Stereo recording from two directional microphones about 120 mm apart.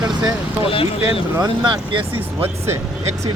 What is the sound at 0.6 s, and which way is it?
Speech, 50° left (ahead or behind).